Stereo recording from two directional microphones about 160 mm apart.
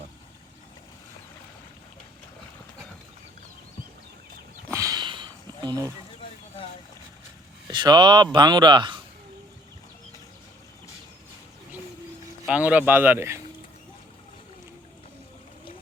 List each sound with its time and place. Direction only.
4.7 s a sound: 20° right (ahead or behind)
7.7 s speech: 30° right (ahead or behind)
12.5 s speech: 10° right (ahead or behind)